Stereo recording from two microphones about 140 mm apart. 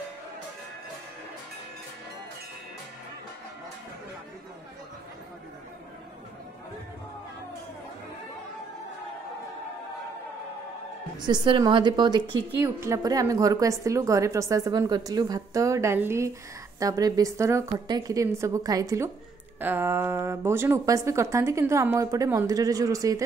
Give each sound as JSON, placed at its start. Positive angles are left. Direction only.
{"t": 11.1, "sound": "a woman's voice", "side_deg": -30}
{"t": 12.5, "sound": "a woman's voice", "side_deg": -20}